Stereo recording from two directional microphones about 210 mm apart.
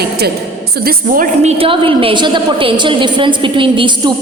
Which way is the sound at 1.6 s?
25° right (ahead or behind).